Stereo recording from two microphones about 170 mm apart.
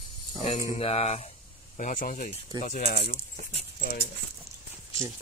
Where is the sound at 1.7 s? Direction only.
55° left (ahead or behind).